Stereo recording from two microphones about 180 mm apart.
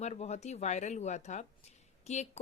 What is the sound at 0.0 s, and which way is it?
A woman's voice, 35° left (ahead or behind).